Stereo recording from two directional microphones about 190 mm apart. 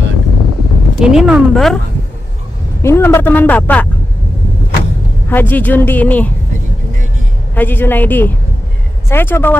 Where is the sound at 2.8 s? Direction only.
15° left (ahead or behind).